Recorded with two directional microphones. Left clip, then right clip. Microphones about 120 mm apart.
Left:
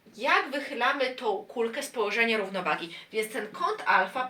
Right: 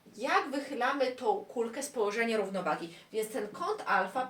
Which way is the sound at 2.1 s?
40° right (ahead or behind).